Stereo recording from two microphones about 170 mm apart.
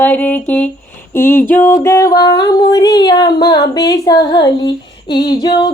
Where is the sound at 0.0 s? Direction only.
10° left (ahead or behind).